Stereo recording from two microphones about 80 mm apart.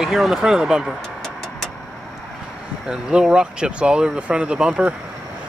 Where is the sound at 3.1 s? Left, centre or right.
Centre.